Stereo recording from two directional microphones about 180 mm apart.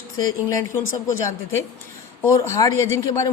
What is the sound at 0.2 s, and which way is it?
Speech, 20° left (ahead or behind).